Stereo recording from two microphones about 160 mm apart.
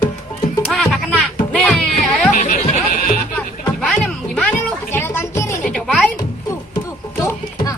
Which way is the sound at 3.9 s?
5° left (ahead or behind).